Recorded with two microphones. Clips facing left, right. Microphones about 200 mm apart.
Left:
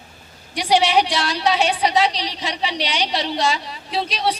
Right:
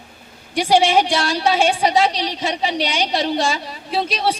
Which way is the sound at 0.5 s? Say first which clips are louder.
Right 2 dB; 50° right (ahead or behind).